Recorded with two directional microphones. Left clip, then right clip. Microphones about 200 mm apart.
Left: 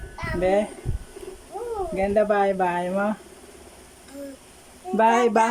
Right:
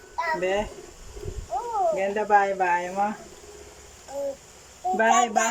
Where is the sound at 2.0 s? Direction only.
20° left (ahead or behind).